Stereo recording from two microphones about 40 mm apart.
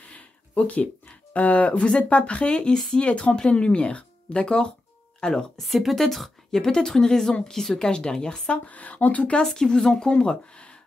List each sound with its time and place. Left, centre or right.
0.1 s a woman's voice: left; by 5.5 s centre
5.6 s a woman's voice: centre
6.6 s a woman's voice: centre
8.6 s speech: left
9.4 s speech: centre